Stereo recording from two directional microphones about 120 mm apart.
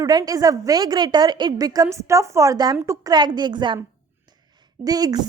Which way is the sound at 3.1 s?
35° right (ahead or behind).